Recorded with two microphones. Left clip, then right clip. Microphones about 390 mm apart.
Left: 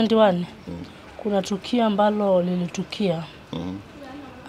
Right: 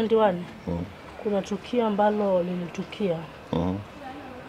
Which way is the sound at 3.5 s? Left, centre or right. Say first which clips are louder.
Right 6 dB; centre.